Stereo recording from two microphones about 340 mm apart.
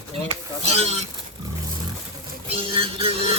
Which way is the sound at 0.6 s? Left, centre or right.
Centre.